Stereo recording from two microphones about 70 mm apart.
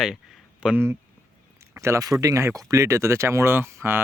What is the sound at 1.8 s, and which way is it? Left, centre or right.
Speech, right.